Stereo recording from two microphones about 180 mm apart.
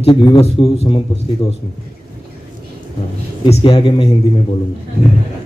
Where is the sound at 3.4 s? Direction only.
30° left (ahead or behind).